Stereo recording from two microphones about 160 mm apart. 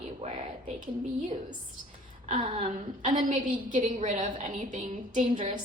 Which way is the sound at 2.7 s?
55° right (ahead or behind).